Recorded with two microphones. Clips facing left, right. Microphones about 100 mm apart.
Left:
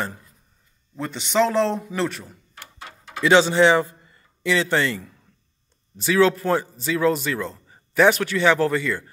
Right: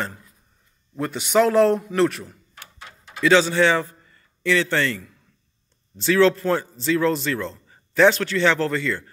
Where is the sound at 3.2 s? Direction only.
20° left (ahead or behind).